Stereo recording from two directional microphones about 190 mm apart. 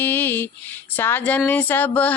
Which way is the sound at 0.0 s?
10° left (ahead or behind).